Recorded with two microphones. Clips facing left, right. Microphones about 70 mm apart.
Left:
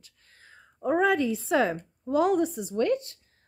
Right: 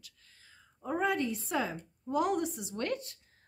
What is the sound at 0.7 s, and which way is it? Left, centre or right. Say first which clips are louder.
A woman's voice: left 8 dB; left.